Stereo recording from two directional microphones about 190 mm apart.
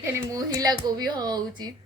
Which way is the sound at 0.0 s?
15° right (ahead or behind).